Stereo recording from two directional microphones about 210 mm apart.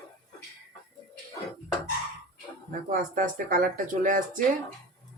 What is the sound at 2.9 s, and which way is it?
Speech, 40° right (ahead or behind).